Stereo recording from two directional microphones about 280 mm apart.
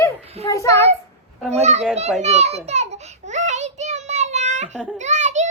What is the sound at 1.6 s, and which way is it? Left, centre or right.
Speech, right.